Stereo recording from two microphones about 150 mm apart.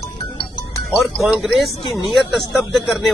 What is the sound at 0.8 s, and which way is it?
Speech, centre (ahead or behind).